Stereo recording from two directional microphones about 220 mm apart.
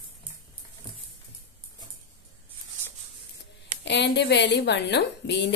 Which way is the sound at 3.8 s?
50° left (ahead or behind).